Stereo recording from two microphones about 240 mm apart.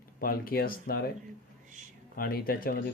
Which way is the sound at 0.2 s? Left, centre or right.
Left.